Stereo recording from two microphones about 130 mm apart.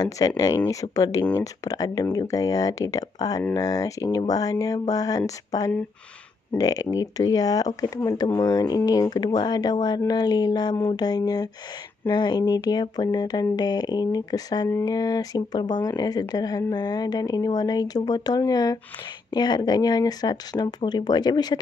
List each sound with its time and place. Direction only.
0.2 s speech: 30° left (ahead or behind)